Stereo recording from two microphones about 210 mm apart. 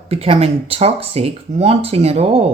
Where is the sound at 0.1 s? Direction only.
30° right (ahead or behind).